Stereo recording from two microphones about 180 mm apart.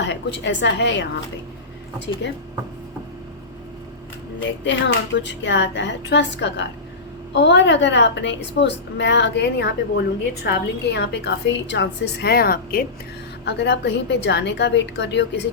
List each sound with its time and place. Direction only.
0.0 s speech: 80° left
2.2 s a woman's voice: 75° left (ahead or behind)
4.6 s a woman's voice: 85° left; by 12.8 s 55° left (ahead or behind)
13.4 s a woman's voice: 70° left (ahead or behind)